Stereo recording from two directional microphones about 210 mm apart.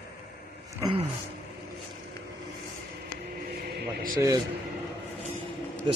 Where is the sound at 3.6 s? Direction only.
40° right (ahead or behind).